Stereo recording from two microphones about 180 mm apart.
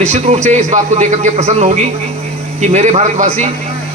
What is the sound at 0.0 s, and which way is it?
A man's voice, 40° right (ahead or behind).